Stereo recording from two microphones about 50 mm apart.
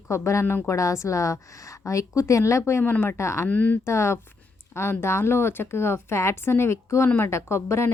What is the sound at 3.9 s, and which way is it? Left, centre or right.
A woman's voice, left.